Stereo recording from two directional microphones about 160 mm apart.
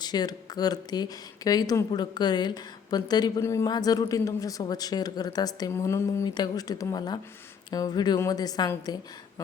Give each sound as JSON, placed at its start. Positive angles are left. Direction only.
{"t": 0.0, "sound": "a woman's voice", "side_deg": 25}